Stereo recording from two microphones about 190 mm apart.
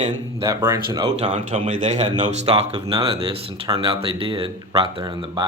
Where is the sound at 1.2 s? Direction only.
30° right (ahead or behind).